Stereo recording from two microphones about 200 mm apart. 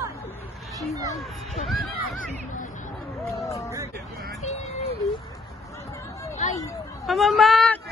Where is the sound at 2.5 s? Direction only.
40° left (ahead or behind).